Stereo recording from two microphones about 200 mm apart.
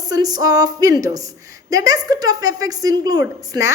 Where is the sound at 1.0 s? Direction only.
15° right (ahead or behind).